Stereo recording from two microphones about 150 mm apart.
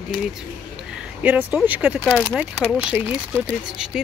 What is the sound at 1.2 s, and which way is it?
Speech, 10° right (ahead or behind).